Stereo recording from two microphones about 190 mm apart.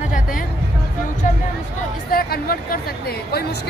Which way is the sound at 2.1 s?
50° left (ahead or behind).